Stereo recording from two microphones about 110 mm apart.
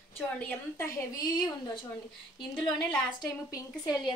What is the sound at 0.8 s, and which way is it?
Speech, 35° left (ahead or behind).